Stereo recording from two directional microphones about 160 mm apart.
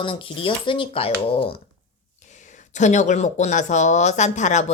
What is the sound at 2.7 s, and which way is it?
Speech, 50° left (ahead or behind).